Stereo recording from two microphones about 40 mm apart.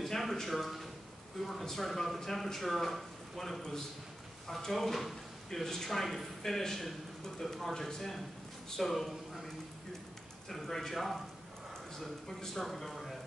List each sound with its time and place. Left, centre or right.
0.0 s a man's voice: centre
8.9 s a man's voice: centre
10.5 s speech: centre
12.4 s speech: centre